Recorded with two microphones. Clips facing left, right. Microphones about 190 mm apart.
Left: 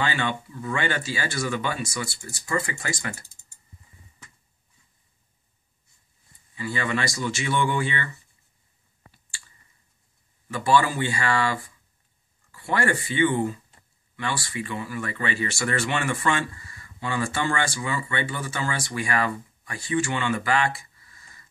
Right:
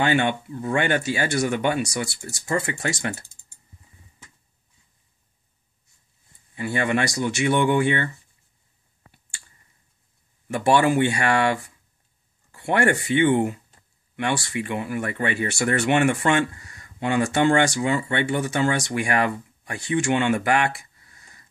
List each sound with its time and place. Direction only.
0.0 s speech: 55° right (ahead or behind); by 3.3 s 80° right
6.5 s speech: 55° right (ahead or behind)
10.5 s speech: 65° right (ahead or behind)
12.7 s speech: 65° right (ahead or behind)